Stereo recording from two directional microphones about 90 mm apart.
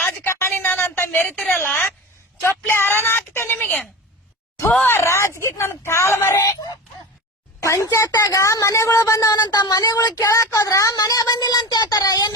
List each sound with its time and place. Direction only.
0.0 s a sound: 30° left (ahead or behind)
1.5 s a woman's voice: 20° left (ahead or behind)
4.9 s a woman's voice: 30° left (ahead or behind)
6.4 s speech: 45° left (ahead or behind)
7.6 s a woman's voice: 30° left (ahead or behind)